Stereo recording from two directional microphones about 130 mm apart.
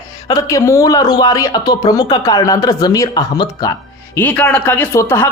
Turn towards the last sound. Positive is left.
turn(degrees=20)  # may be behind; listen again after turning